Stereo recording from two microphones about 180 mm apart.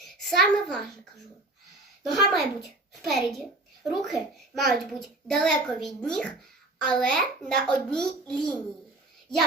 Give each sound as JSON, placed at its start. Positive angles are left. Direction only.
{"t": 0.3, "sound": "a child's voice", "side_deg": 5}
{"t": 2.0, "sound": "a child's voice", "side_deg": 0}